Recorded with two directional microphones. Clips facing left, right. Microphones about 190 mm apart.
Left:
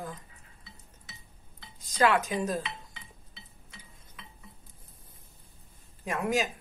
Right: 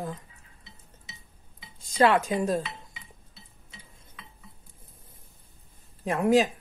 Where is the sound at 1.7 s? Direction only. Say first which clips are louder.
Right 3 dB; 30° right (ahead or behind).